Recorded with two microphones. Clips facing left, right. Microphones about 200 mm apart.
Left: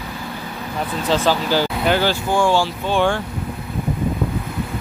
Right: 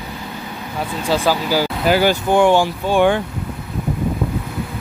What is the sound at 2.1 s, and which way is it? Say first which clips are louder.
Speech: right 4 dB; 20° right (ahead or behind).